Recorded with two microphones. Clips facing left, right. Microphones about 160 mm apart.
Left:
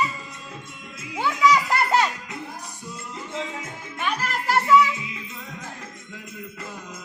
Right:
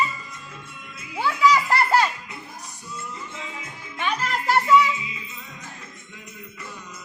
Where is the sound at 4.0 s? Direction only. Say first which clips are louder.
Right 1 dB; 5° left (ahead or behind).